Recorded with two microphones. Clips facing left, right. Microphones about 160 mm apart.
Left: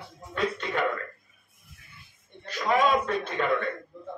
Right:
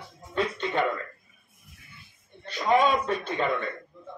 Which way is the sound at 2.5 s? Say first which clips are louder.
Right 1 dB; 30° right (ahead or behind).